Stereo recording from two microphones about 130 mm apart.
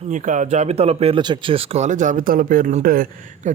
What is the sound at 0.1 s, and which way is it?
A man's voice, 70° right (ahead or behind).